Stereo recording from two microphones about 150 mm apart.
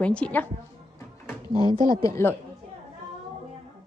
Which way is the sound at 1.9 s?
20° left (ahead or behind).